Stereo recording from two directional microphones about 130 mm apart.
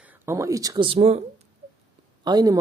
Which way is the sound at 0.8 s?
50° right (ahead or behind).